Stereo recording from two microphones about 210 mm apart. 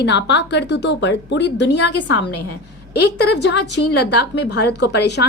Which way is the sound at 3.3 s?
55° left (ahead or behind).